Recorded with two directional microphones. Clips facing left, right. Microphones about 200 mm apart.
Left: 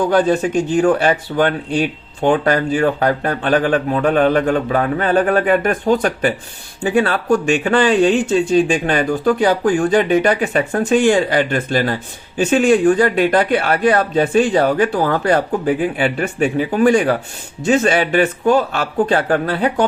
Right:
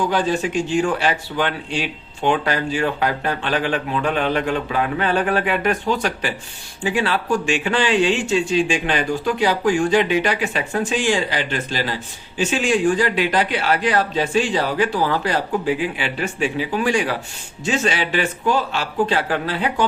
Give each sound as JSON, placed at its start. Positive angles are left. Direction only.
{"t": 0.1, "sound": "speech", "side_deg": 50}